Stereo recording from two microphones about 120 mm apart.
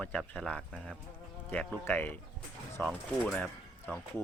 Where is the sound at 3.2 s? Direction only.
5° left (ahead or behind).